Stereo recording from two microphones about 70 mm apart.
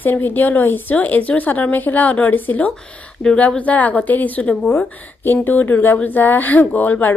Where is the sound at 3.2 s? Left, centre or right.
Centre.